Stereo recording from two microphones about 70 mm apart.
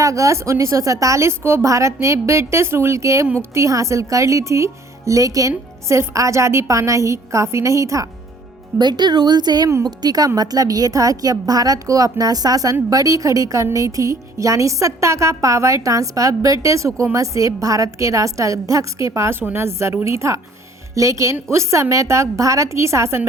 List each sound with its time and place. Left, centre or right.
0.0 s speech: right
8.8 s a woman's voice: right
9.8 s a woman's voice: right
19.4 s a woman's voice: right